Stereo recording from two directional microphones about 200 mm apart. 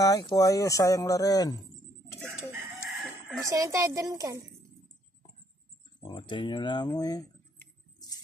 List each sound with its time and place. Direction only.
0.0 s speech: 20° left (ahead or behind)
3.4 s a woman's voice: 15° right (ahead or behind)
6.0 s speech: 25° left (ahead or behind)